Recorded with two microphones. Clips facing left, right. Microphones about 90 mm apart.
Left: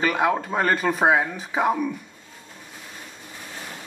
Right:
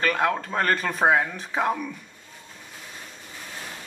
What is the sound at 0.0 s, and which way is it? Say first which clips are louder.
Speech: left 2 dB; 10° left (ahead or behind).